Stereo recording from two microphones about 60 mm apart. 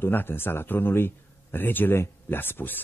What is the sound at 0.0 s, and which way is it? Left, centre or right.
A man's voice, left.